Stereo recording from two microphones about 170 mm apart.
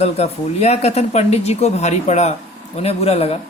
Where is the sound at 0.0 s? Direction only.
40° left (ahead or behind).